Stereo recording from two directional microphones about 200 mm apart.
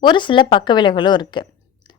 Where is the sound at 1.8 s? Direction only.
25° left (ahead or behind).